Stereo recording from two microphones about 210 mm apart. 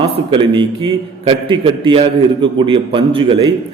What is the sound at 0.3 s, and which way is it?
A man's voice, 20° right (ahead or behind).